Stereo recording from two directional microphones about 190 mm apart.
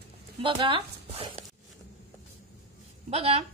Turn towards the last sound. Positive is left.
turn(degrees=-30)  # may be behind; listen again after turning